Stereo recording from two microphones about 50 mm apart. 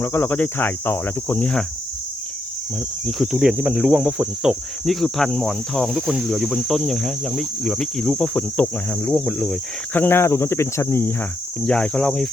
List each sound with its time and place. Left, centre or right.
0.0 s speech: left
0.3 s cricket: left
3.3 s speech: centre
4.9 s speech: centre
6.6 s cricket: centre
8.3 s cricket: left
9.1 s speech: centre
10.1 s speech: left
11.6 s cricket: centre
12.0 s speech: centre